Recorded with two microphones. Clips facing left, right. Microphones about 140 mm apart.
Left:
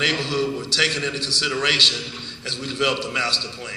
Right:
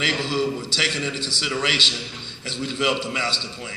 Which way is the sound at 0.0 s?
45° right (ahead or behind).